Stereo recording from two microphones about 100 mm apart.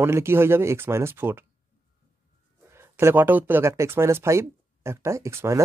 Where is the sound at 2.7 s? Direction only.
20° right (ahead or behind).